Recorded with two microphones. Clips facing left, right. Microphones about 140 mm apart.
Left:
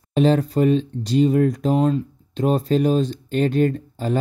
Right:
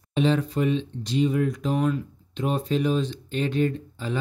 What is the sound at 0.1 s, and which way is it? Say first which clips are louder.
Speech: left 5 dB; 40° left (ahead or behind).